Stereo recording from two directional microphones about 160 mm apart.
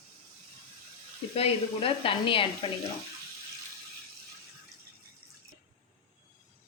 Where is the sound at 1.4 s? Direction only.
35° left (ahead or behind).